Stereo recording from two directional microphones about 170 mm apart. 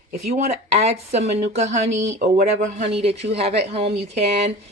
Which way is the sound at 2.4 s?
40° right (ahead or behind).